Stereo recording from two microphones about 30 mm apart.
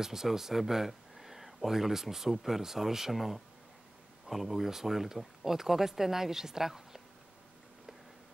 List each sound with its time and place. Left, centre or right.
0.0 s speech: centre